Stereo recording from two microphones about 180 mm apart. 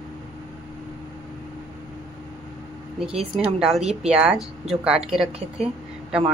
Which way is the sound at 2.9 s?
5° right (ahead or behind).